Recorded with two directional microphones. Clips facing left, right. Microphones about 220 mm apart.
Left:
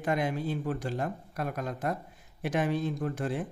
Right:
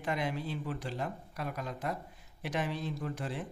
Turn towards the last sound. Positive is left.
turn(degrees=50)  # may be behind; listen again after turning